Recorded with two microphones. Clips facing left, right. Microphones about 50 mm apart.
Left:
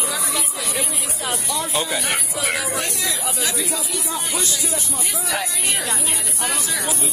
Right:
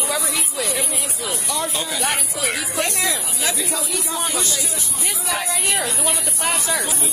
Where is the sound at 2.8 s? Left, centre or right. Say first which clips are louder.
Right 2 dB; right.